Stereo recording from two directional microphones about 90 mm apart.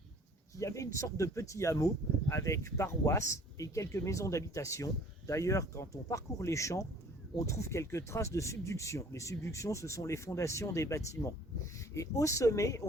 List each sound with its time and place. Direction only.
0.6 s speech: 35° left (ahead or behind)